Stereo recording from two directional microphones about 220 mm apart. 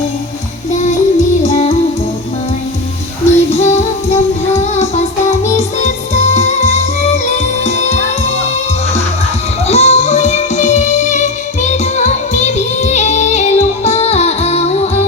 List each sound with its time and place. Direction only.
1.4 s music: 30° left (ahead or behind)
3.2 s music: 30° left (ahead or behind)
9.6 s music: 30° left (ahead or behind)